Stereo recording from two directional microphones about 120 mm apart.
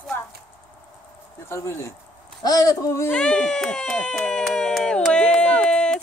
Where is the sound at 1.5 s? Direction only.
20° left (ahead or behind).